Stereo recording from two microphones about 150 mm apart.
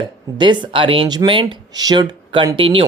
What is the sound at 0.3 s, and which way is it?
Speech, 30° right (ahead or behind).